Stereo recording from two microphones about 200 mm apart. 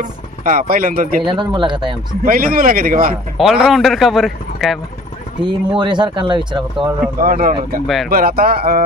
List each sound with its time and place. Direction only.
0.0 s speech: 40° right (ahead or behind)
1.2 s speech: 25° right (ahead or behind)
2.2 s speech: 45° right (ahead or behind)
3.3 s a man's voice: centre (ahead or behind)
5.4 s speech: 25° right (ahead or behind)
7.2 s speech: 45° right (ahead or behind)
7.8 s a man's voice: centre (ahead or behind)
8.1 s speech: 45° right (ahead or behind)